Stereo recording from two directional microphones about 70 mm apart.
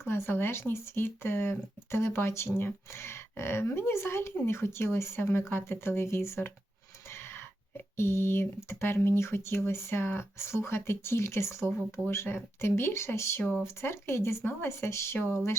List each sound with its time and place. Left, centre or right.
0.1 s speech: left
7.9 s speech: left